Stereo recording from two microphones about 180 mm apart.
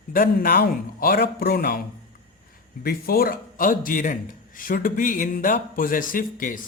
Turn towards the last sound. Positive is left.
turn(degrees=50)  # may be behind; listen again after turning